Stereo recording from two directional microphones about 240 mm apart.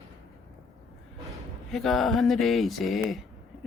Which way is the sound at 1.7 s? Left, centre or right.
Centre.